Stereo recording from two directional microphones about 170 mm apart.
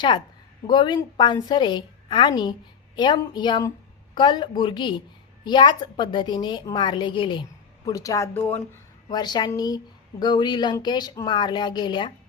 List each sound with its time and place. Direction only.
0.7 s a woman's voice: 25° left (ahead or behind); by 8.6 s 10° left (ahead or behind)
9.0 s a woman's voice: 25° left (ahead or behind)